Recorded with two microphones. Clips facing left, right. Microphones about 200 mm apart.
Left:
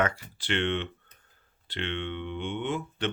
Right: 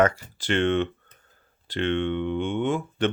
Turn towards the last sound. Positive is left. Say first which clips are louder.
# right 6 dB
turn(degrees=-50)  # may be behind; listen again after turning